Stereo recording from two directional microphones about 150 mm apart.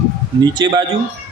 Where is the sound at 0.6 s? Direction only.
25° right (ahead or behind).